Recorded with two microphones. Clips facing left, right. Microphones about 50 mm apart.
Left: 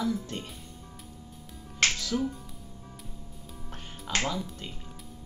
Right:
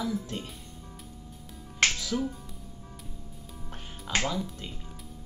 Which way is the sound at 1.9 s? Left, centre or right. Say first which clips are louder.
Left 1 dB; centre.